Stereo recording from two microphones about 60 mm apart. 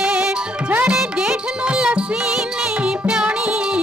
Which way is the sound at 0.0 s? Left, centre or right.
Centre.